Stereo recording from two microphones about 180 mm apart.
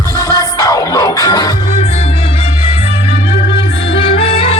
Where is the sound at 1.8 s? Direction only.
35° left (ahead or behind).